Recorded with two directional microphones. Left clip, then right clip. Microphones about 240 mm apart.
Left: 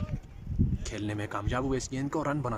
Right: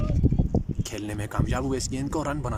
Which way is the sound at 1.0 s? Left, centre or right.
Centre.